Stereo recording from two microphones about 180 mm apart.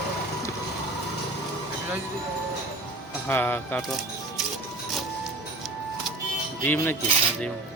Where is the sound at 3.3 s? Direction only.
10° left (ahead or behind).